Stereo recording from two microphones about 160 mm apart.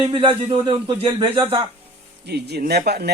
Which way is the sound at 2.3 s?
85° right.